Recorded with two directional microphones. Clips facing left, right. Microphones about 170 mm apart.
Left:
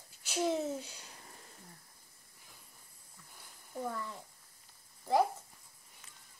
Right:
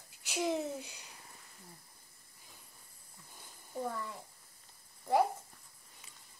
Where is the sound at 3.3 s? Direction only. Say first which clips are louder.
Right 2 dB; 15° right (ahead or behind).